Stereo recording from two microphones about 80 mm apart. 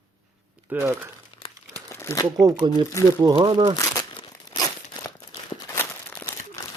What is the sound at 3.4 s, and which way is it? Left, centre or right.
Speech, right.